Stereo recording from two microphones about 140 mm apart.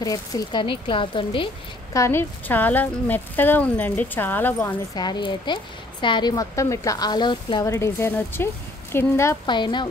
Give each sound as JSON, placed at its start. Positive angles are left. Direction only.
{"t": 0.0, "sound": "speech", "side_deg": 25}
{"t": 2.0, "sound": "speech", "side_deg": 15}
{"t": 4.9, "sound": "speech", "side_deg": 30}
{"t": 7.6, "sound": "a woman's voice", "side_deg": 20}
{"t": 9.5, "sound": "speech", "side_deg": 35}